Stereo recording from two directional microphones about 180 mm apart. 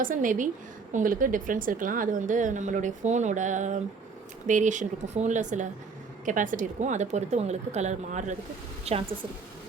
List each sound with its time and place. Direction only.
0.0 s a woman's voice: 45° right (ahead or behind)